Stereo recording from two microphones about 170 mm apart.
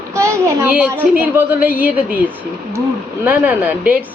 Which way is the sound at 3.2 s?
10° right (ahead or behind).